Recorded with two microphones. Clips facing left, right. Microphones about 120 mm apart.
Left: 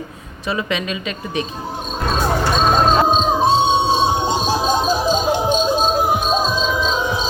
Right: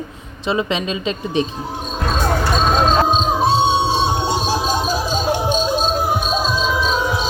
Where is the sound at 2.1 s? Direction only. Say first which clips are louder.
Left 1 dB; 5° left (ahead or behind).